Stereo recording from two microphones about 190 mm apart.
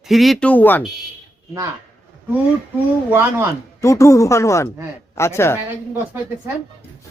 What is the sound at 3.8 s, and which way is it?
Speech, 15° left (ahead or behind).